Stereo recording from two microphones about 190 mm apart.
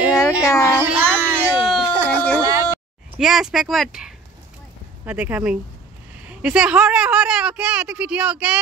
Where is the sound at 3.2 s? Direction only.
Centre (ahead or behind).